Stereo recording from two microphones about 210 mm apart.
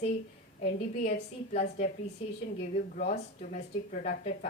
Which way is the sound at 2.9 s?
35° left (ahead or behind).